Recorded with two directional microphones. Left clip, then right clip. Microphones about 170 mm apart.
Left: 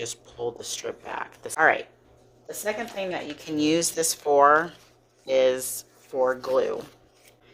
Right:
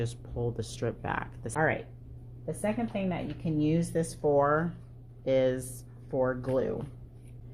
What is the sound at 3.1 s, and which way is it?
Speech, 45° left (ahead or behind).